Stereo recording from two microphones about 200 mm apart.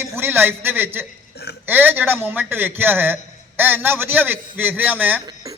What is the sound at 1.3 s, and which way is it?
Burping, 55° left (ahead or behind).